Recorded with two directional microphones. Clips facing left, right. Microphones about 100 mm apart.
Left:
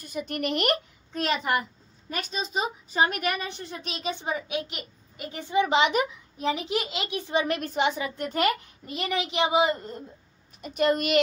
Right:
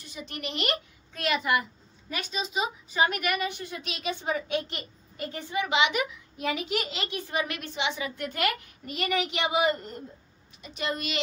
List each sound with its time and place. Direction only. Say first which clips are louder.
0.0 s speech: left 7 dB; 50° left (ahead or behind)
1.2 s a woman's voice: even; 40° left (ahead or behind)
4.2 s a child's voice: right 1 dB; 20° left (ahead or behind)
4.6 s a child's voice: even; 10° left (ahead or behind)
5.5 s a child's voice: left 4 dB; 35° left (ahead or behind)
7.4 s a woman's voice: left 6 dB; 40° left (ahead or behind)
8.9 s a child's voice: left 1 dB; 20° left (ahead or behind)
10.6 s speech: left 8 dB; 50° left (ahead or behind)